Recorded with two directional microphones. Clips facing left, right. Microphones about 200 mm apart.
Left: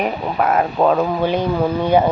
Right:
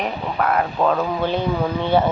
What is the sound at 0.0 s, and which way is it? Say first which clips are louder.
Speech: left 3 dB; 20° left (ahead or behind).